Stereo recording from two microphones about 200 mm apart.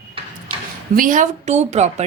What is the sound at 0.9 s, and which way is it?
A woman's voice, 40° right (ahead or behind).